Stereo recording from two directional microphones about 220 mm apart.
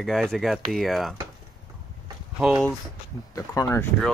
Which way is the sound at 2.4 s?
Centre (ahead or behind).